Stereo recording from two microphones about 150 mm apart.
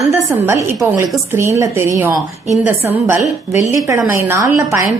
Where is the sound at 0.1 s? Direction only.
15° right (ahead or behind).